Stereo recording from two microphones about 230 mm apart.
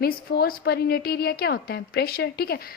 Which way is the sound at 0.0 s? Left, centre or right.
Left.